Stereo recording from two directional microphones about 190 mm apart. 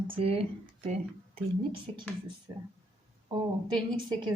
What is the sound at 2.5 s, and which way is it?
Speech, 20° right (ahead or behind).